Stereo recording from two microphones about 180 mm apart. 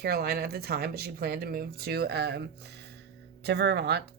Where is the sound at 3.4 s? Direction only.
65° right (ahead or behind).